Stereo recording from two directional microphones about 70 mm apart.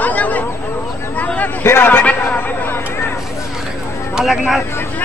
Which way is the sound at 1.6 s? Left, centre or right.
Left.